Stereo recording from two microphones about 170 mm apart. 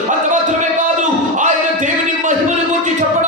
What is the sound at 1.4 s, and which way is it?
Music, 45° right (ahead or behind).